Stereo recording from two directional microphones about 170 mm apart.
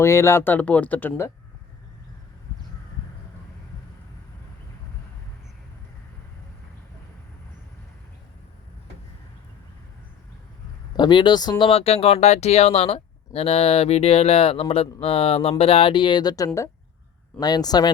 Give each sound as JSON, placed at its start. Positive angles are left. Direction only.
{"t": 0.0, "sound": "speech", "side_deg": 15}
{"t": 10.9, "sound": "speech", "side_deg": 25}